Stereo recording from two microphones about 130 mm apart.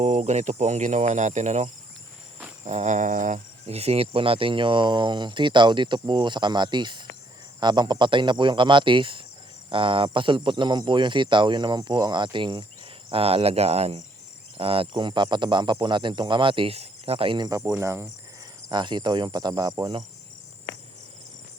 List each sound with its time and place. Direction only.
0.0 s speech: 60° right (ahead or behind); by 12.6 s 35° right (ahead or behind)
13.1 s cricket: 45° right (ahead or behind)
14.6 s speech: 45° right (ahead or behind)
17.4 s speech: 25° right (ahead or behind)
18.7 s speech: 35° right (ahead or behind)